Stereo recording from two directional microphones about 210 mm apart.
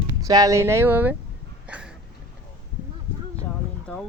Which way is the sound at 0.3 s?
15° right (ahead or behind).